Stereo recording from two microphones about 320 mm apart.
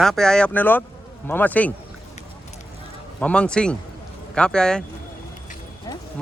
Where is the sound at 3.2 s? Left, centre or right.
Centre.